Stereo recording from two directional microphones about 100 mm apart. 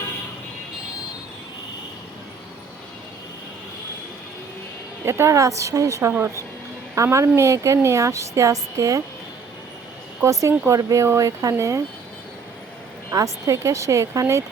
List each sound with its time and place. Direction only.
5.0 s a woman's voice: 30° right (ahead or behind)
10.7 s a woman's voice: 35° right (ahead or behind)
13.1 s a woman's voice: 35° right (ahead or behind)